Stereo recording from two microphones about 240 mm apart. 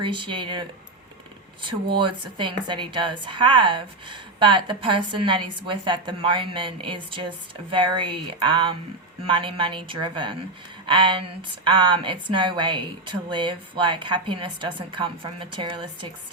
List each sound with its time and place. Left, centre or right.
0.0 s a woman's voice: centre
1.6 s a woman's voice: right